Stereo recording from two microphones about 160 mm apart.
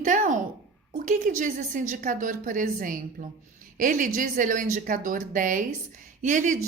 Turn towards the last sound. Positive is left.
turn(degrees=-50)  # may be behind; listen again after turning